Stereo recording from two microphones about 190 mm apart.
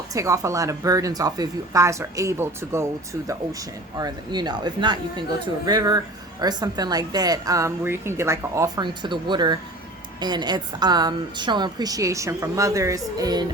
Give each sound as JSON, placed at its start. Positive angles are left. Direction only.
{"t": 0.1, "sound": "a woman's voice", "side_deg": -15}